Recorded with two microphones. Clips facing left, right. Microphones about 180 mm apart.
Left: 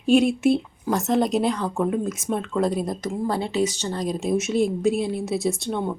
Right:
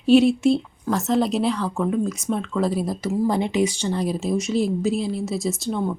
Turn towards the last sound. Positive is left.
turn(degrees=0)  # may be behind; listen again after turning